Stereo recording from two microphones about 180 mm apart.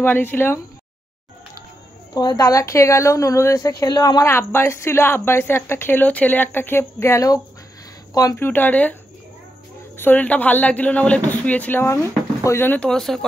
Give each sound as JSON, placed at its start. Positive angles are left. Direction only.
{"t": 0.0, "sound": "a woman's voice", "side_deg": 10}
{"t": 2.1, "sound": "a woman's voice", "side_deg": 20}
{"t": 9.9, "sound": "a woman's voice", "side_deg": 10}